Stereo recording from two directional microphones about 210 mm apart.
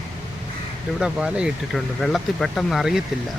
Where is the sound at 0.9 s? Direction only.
5° right (ahead or behind).